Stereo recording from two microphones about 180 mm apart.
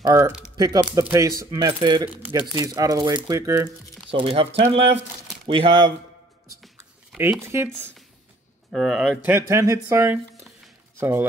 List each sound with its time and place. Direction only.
0.0 s speech: 20° right (ahead or behind)
4.1 s speech: 30° right (ahead or behind)
7.4 s speech: 15° right (ahead or behind)
8.7 s speech: centre (ahead or behind)